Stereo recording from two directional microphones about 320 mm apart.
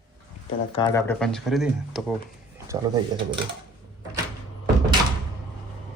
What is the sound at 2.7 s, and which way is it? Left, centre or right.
Speech, centre.